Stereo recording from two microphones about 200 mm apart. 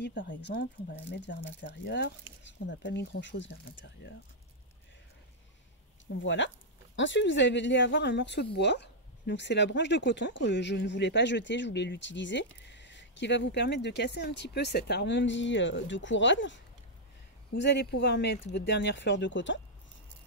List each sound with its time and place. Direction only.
0.0 s speech: 65° left (ahead or behind)
6.2 s speech: 65° left (ahead or behind)
17.6 s speech: 60° left (ahead or behind)